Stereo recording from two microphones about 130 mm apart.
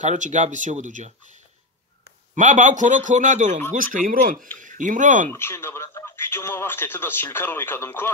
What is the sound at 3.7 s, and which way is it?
Speech, 90° right.